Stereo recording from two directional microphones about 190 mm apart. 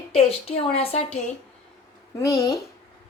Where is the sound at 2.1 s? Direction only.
15° left (ahead or behind).